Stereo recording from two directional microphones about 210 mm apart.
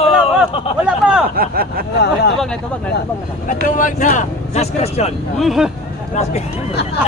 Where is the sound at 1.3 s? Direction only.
45° right (ahead or behind).